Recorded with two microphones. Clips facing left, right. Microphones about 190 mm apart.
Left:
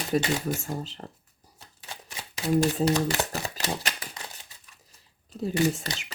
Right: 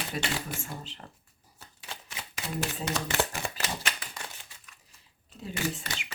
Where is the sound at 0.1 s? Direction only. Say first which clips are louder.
Left 11 dB; 40° left (ahead or behind).